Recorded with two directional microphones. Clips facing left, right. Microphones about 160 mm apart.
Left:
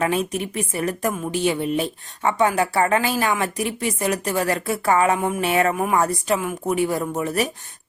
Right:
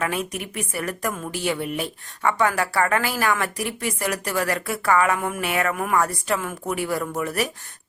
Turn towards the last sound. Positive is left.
turn(degrees=25)  # may be behind; listen again after turning